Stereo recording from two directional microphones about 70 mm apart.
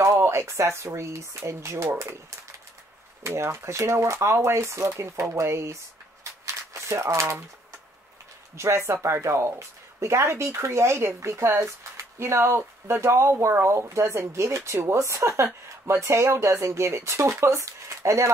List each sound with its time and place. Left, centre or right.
0.0 s speech: right
3.3 s speech: right
6.4 s shuffling cards: right
8.5 s speech: right